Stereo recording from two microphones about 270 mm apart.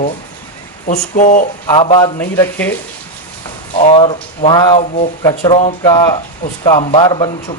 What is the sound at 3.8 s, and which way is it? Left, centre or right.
Speech, left.